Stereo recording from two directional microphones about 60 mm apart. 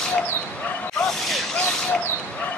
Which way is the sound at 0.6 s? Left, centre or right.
Left.